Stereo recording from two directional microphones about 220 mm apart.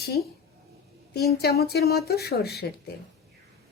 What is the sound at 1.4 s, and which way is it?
Speech, 45° left (ahead or behind).